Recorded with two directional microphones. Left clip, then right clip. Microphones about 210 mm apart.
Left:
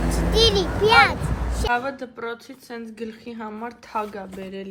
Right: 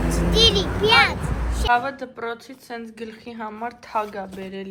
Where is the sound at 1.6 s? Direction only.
10° left (ahead or behind).